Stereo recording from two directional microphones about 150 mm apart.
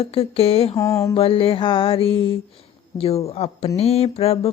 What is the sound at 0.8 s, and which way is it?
Mantra, 20° left (ahead or behind).